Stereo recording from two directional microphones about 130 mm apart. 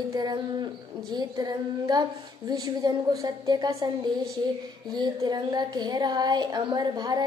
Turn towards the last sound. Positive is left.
turn(degrees=-30)  # may be behind; listen again after turning